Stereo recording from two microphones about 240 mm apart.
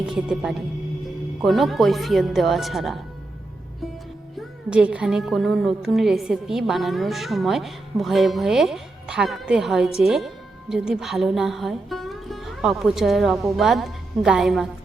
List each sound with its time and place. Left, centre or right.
0.0 s a woman's voice: centre
4.4 s a woman's voice: centre